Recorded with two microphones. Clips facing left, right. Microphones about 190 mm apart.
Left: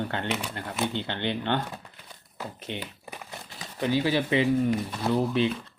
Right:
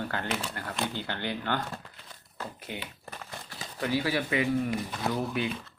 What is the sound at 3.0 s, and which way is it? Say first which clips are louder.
Crumpling: left 1 dB; 10° left (ahead or behind).